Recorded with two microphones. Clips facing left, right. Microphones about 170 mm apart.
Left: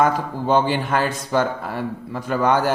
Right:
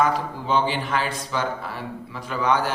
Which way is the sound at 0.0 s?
45° left (ahead or behind).